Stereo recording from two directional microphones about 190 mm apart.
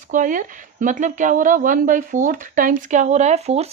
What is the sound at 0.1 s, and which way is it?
A woman's voice, 45° right (ahead or behind).